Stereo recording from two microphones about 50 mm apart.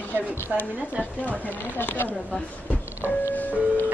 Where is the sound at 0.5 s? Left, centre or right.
Centre.